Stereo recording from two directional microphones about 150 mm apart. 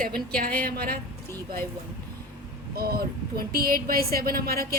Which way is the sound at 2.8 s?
90° right.